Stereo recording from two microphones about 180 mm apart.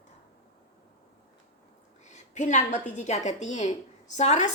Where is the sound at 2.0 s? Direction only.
40° left (ahead or behind).